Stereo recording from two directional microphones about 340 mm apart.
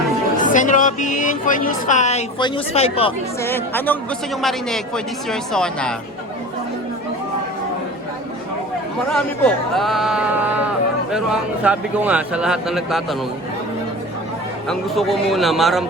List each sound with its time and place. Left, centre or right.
0.3 s a woman's voice: left; by 3.9 s centre
5.3 s speech: centre
9.0 s speech: centre
14.7 s speech: centre